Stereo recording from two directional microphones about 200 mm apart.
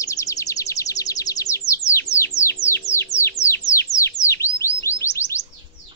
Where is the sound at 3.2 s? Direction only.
15° left (ahead or behind).